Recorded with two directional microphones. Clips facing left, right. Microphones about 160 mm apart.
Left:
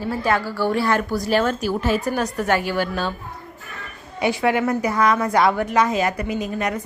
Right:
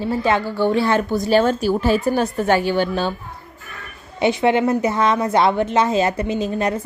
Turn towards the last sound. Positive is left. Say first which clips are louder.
# right 3 dB
turn(degrees=-30)  # may be behind; listen again after turning